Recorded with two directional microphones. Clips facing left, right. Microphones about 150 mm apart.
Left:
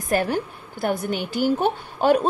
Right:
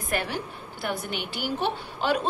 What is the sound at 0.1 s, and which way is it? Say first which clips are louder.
A woman's voice: left 8 dB; 45° left (ahead or behind).